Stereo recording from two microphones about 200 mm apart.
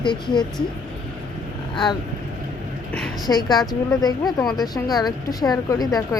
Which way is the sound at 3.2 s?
20° left (ahead or behind).